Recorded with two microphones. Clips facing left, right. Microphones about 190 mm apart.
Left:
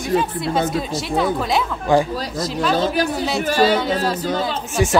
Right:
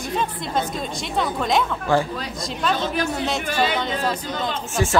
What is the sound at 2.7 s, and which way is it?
Speech, 35° left (ahead or behind).